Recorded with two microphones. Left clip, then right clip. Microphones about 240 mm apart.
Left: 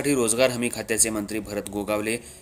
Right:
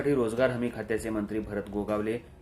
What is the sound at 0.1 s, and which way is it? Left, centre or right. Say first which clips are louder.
Speech: left 5 dB; left.